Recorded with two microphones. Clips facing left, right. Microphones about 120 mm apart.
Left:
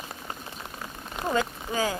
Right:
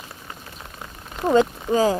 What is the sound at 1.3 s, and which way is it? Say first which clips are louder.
Speech: right 10 dB; 30° right (ahead or behind).